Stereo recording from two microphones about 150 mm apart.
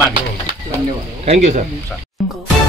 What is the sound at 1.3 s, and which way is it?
Speech, 50° right (ahead or behind).